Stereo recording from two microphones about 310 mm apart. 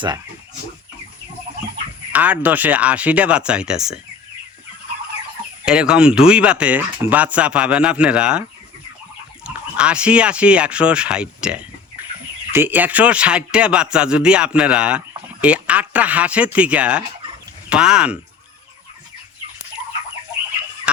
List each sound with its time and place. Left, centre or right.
2.1 s speech: centre
5.6 s speech: centre
9.5 s speech: centre